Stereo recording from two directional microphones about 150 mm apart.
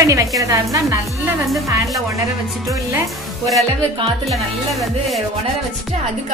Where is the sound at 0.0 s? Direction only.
20° right (ahead or behind).